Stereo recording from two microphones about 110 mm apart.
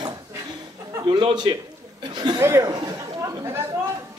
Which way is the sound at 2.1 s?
40° right (ahead or behind).